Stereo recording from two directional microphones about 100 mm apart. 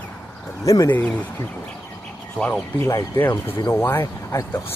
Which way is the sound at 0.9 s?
15° left (ahead or behind).